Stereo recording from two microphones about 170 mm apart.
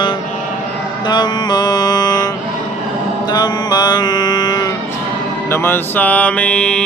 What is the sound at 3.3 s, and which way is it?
Mantra, 25° left (ahead or behind).